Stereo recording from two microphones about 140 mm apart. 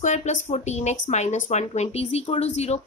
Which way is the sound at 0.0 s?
60° left (ahead or behind).